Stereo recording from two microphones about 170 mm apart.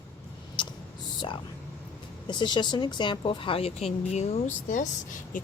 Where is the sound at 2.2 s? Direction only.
25° left (ahead or behind).